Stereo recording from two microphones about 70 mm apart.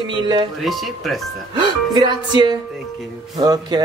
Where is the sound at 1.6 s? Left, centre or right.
Right.